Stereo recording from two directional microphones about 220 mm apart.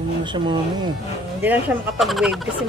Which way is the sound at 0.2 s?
20° right (ahead or behind).